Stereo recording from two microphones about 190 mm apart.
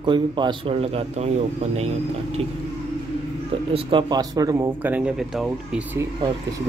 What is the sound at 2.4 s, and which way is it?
Speech, 30° right (ahead or behind).